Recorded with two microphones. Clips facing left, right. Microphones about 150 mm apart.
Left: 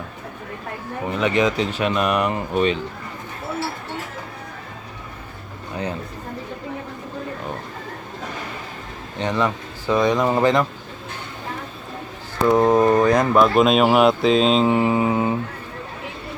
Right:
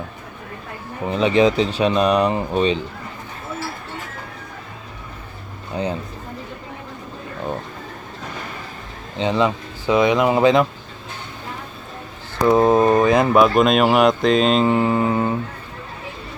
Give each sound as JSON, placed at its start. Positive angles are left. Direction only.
{"t": 1.1, "sound": "speech", "side_deg": -25}
{"t": 5.7, "sound": "speech", "side_deg": -25}
{"t": 9.1, "sound": "speech", "side_deg": -20}
{"t": 12.5, "sound": "speech", "side_deg": -20}
{"t": 13.5, "sound": "speech", "side_deg": 0}